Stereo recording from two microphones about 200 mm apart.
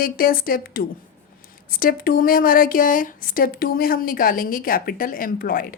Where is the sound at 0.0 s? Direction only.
45° left (ahead or behind).